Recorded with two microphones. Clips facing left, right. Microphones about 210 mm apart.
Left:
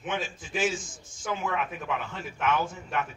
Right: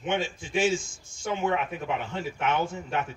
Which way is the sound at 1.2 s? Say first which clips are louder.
Right 3 dB; 30° right (ahead or behind).